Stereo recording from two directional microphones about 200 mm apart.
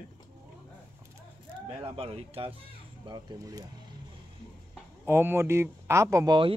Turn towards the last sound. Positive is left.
turn(degrees=-20)  # may be behind; listen again after turning